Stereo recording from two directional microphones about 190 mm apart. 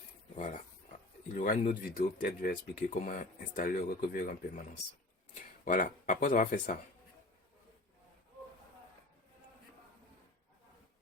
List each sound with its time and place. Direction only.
0.3 s speech: 40° left (ahead or behind)